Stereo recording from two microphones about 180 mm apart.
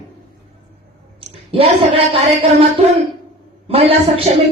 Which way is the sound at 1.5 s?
30° right (ahead or behind).